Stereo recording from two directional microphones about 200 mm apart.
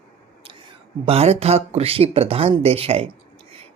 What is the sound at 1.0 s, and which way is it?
Speech, 30° right (ahead or behind).